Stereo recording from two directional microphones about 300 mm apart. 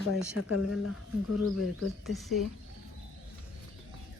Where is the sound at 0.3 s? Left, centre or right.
Left.